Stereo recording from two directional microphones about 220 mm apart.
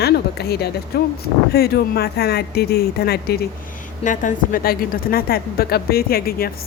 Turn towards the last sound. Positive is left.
turn(degrees=45)  # may be behind; listen again after turning